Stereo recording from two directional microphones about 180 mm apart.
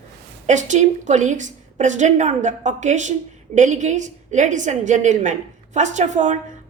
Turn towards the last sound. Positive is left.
turn(degrees=-40)  # may be behind; listen again after turning